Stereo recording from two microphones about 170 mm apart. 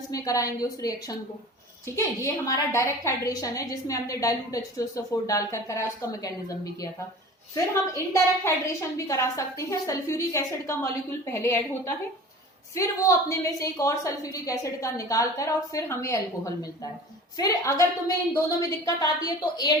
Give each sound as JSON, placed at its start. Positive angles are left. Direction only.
{"t": 0.1, "sound": "a woman's voice", "side_deg": 20}